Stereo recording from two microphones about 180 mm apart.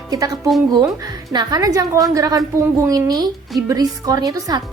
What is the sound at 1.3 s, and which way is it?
A woman's voice, 20° right (ahead or behind).